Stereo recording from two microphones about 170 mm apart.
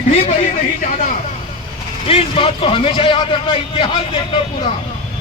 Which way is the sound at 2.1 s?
35° left (ahead or behind).